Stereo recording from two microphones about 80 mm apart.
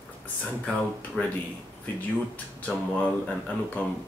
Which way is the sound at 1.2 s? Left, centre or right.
Centre.